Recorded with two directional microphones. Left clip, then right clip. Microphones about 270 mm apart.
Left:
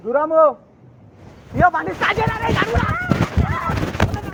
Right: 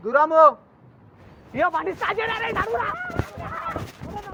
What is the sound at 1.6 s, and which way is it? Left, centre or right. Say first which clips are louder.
Speech: left 6 dB; right.